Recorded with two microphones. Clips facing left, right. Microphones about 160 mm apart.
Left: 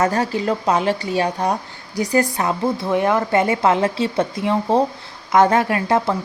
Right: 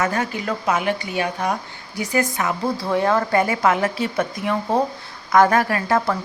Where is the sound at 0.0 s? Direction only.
35° left (ahead or behind).